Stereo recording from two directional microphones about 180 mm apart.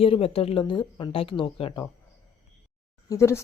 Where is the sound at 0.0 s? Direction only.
30° left (ahead or behind).